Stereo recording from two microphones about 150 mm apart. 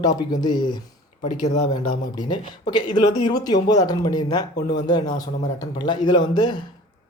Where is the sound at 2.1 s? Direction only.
30° left (ahead or behind).